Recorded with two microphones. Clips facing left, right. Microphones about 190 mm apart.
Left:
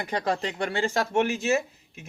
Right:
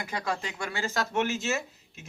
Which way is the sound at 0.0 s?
35° left (ahead or behind).